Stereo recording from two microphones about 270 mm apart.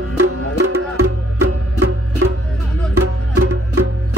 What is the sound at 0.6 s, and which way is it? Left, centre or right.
Music, right.